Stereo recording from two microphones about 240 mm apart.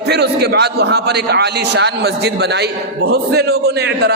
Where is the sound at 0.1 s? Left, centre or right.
Right.